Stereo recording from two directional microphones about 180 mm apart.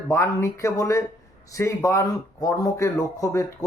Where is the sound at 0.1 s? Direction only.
15° left (ahead or behind).